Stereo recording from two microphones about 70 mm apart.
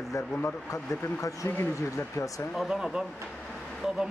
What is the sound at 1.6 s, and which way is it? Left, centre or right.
Speech, left.